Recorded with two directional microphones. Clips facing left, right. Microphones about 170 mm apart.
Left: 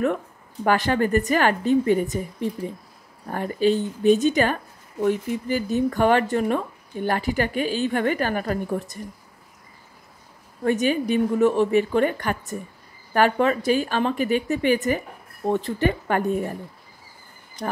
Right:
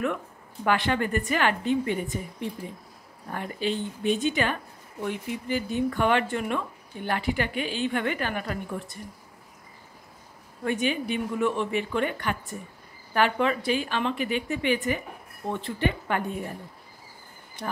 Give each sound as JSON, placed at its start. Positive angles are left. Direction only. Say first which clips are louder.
{"t": 0.7, "sound": "speech", "louder": "left 4 dB", "side_deg": 40}
{"t": 3.3, "sound": "speech", "louder": "left 8 dB", "side_deg": 40}
{"t": 10.6, "sound": "a woman's voice", "louder": "left 6 dB", "side_deg": 40}